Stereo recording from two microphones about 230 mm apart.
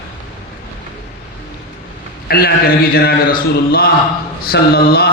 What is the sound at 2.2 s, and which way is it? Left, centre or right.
A man's voice, left.